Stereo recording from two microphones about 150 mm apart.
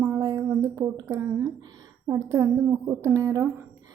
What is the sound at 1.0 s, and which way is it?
A woman's voice, 20° right (ahead or behind).